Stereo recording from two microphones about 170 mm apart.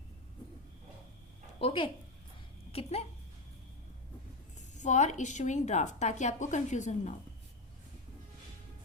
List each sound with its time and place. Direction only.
1.6 s speech: 30° left (ahead or behind)
4.7 s a woman's voice: 45° left (ahead or behind)